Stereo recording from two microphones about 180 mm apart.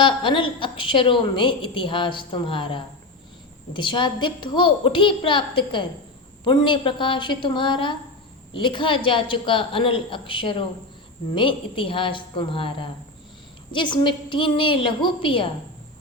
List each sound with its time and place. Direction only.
0.0 s a woman's voice: 25° left (ahead or behind)